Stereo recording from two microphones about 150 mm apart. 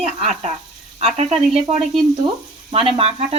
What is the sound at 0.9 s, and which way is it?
Speech, 45° right (ahead or behind).